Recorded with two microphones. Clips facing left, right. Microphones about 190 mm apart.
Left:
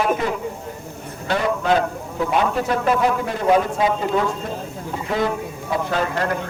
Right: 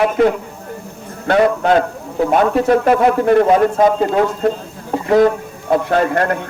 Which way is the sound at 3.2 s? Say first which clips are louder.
Right 7 dB; 60° right (ahead or behind).